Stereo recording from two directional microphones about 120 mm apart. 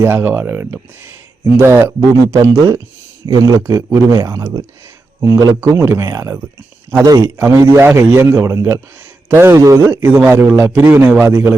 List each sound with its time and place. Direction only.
0.0 s a man's voice: 15° right (ahead or behind)
7.0 s speech: 30° right (ahead or behind)
7.3 s a man's voice: 20° right (ahead or behind)
9.8 s a man's voice: 15° right (ahead or behind)